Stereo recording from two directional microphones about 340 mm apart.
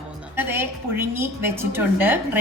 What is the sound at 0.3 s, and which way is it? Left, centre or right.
A woman's voice, centre.